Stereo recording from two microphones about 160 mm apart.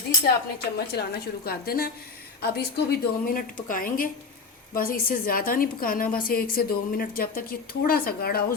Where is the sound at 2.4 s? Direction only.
90° left; by 8.4 s 75° left (ahead or behind).